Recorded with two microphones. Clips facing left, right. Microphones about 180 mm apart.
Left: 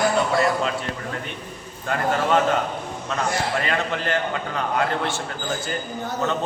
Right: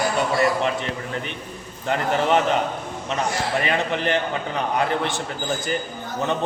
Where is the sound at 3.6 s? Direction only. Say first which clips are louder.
Right 2 dB; 20° right (ahead or behind).